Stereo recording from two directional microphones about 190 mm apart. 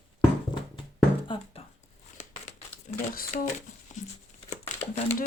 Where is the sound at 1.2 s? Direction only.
25° left (ahead or behind).